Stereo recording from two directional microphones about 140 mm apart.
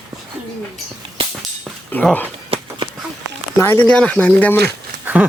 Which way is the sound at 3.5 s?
15° left (ahead or behind).